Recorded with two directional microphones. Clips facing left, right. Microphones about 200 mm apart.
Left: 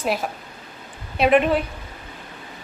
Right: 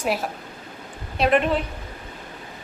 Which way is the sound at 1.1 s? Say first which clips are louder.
Left 3 dB; 5° left (ahead or behind).